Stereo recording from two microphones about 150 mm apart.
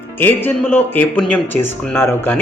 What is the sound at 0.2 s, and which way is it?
Speech, 15° left (ahead or behind).